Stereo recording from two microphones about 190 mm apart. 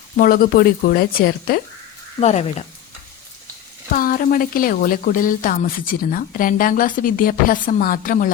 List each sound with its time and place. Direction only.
0.2 s speech: 50° left (ahead or behind)
2.2 s speech: 35° left (ahead or behind)
3.9 s speech: 50° left (ahead or behind)